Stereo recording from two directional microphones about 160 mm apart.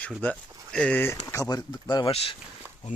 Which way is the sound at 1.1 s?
20° left (ahead or behind).